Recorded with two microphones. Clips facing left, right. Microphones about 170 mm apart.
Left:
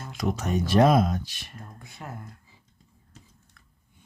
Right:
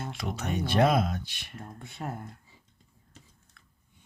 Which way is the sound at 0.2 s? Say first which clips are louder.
Left 7 dB; 45° left (ahead or behind).